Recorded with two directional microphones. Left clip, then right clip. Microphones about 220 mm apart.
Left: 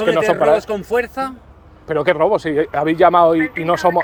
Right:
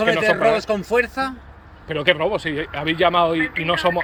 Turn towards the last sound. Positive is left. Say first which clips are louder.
# left 4 dB
turn(degrees=25)  # may be behind; listen again after turning